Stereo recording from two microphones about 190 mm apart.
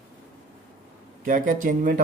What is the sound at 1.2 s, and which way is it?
Speech, 45° right (ahead or behind).